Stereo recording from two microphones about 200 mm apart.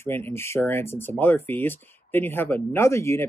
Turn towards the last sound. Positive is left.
turn(degrees=15)  # may be behind; listen again after turning